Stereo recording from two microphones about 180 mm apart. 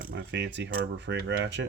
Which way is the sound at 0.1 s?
75° right (ahead or behind).